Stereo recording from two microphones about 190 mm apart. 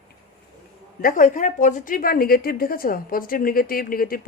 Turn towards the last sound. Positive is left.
turn(degrees=50)  # may be behind; listen again after turning